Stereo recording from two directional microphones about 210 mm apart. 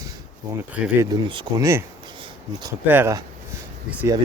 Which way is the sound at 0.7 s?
5° right (ahead or behind).